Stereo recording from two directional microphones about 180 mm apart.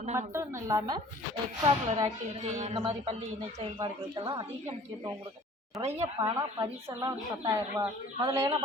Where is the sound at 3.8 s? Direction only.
25° right (ahead or behind).